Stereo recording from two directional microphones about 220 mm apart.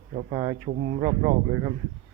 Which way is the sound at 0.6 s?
40° right (ahead or behind).